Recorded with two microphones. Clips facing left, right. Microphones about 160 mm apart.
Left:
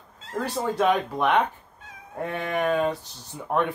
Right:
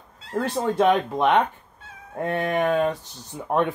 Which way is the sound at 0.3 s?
15° right (ahead or behind).